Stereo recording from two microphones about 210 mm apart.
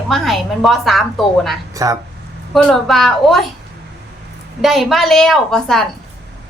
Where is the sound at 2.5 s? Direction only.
Centre (ahead or behind).